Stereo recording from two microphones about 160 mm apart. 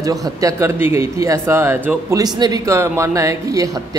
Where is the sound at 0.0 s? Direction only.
20° right (ahead or behind).